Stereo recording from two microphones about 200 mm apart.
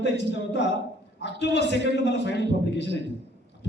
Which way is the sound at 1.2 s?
60° left (ahead or behind).